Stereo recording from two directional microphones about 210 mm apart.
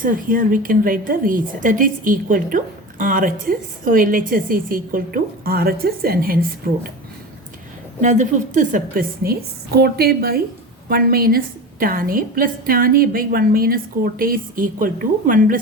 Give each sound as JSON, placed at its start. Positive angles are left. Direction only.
{"t": 0.0, "sound": "a woman's voice", "side_deg": -40}
{"t": 8.0, "sound": "a woman's voice", "side_deg": -35}